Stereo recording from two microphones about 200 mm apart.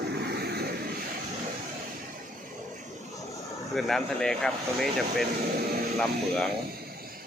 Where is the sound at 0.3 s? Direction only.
55° right (ahead or behind).